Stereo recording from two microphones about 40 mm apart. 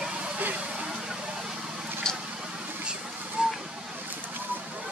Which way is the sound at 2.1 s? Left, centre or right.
Centre.